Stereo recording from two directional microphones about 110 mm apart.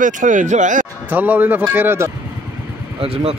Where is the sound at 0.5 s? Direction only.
90° right.